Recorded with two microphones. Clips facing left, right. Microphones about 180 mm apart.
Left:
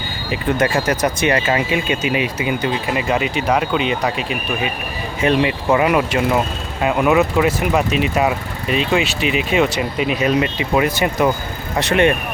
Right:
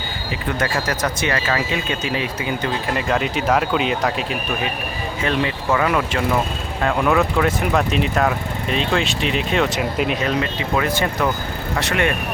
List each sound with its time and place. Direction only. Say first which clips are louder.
0.6 s speech: left 4 dB; 20° left (ahead or behind)
5.2 s speech: left 5 dB; 20° left (ahead or behind); by 10.2 s centre (ahead or behind)
10.2 s speech: left 4 dB; 15° left (ahead or behind)